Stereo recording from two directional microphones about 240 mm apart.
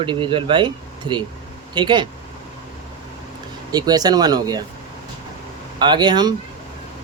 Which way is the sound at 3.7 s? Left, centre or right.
Centre.